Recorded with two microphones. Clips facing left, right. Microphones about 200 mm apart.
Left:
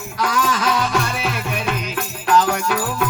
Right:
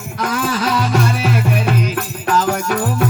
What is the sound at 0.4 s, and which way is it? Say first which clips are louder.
Music: right 2 dB; 35° right (ahead or behind).